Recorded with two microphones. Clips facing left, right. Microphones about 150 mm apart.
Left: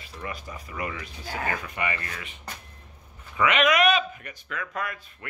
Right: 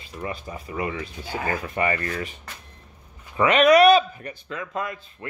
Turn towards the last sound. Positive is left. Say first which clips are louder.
# right 3 dB
turn(degrees=-25)  # may be behind; listen again after turning